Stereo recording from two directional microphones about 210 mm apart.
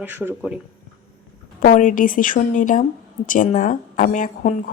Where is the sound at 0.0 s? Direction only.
10° right (ahead or behind).